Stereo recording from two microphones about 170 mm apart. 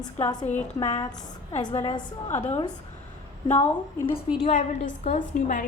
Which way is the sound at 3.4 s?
25° left (ahead or behind).